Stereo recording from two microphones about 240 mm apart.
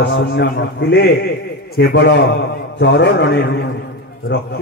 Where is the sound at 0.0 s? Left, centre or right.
Left.